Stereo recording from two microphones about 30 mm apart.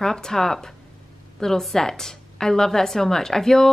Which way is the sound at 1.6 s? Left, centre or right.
Centre.